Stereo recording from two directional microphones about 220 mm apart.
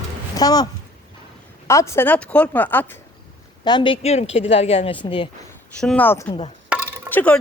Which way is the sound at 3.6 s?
20° left (ahead or behind).